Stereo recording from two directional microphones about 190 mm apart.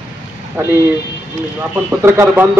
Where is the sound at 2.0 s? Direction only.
15° right (ahead or behind).